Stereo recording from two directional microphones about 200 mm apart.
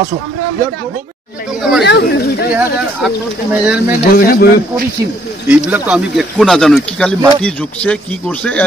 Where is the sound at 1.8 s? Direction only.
55° left (ahead or behind).